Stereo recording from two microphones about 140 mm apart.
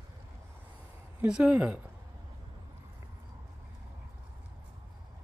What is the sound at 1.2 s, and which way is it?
Speech, 10° right (ahead or behind).